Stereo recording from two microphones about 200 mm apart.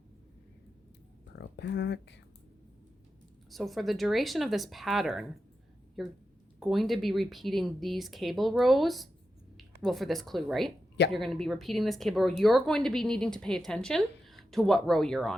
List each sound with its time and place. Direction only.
1.4 s speech: 60° left (ahead or behind)
3.5 s speech: centre (ahead or behind)